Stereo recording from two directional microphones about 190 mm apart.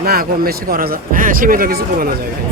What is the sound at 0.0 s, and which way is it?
Speech, 50° right (ahead or behind).